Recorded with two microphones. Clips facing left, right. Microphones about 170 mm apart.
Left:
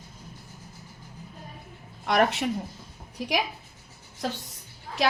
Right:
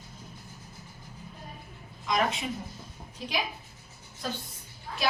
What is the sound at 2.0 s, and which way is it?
Speech, 70° left (ahead or behind).